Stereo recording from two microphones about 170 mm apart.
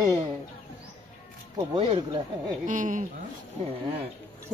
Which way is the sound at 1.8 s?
35° right (ahead or behind).